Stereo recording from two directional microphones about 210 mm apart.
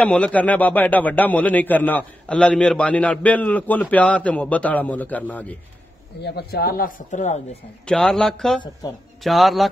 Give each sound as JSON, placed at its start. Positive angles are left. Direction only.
{"t": 0.0, "sound": "a man's voice", "side_deg": 5}
{"t": 6.2, "sound": "speech", "side_deg": 50}
{"t": 7.8, "sound": "speech", "side_deg": 5}